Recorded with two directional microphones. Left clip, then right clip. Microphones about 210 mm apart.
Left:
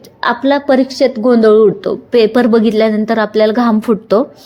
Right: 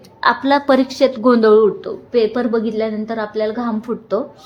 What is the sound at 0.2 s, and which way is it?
A woman's voice, 15° left (ahead or behind).